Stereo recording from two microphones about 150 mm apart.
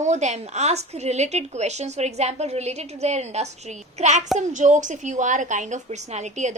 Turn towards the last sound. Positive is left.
turn(degrees=-50)  # may be behind; listen again after turning